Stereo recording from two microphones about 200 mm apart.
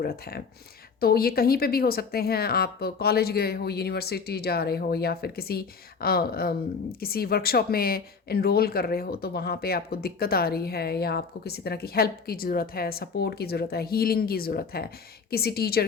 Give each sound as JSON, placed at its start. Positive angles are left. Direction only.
{"t": 0.0, "sound": "speech", "side_deg": 50}